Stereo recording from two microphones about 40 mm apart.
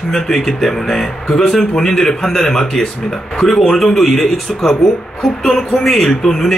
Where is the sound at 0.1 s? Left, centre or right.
Centre.